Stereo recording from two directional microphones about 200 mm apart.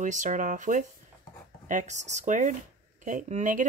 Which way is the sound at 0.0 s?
40° right (ahead or behind).